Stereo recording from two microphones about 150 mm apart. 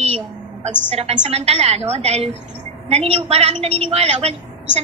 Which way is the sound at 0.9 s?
45° right (ahead or behind).